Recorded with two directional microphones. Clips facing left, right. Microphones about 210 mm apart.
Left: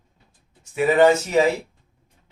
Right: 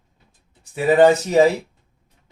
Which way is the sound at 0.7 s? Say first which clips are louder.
Right 2 dB; 35° right (ahead or behind).